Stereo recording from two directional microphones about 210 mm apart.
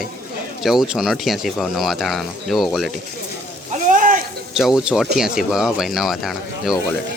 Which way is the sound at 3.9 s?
40° right (ahead or behind).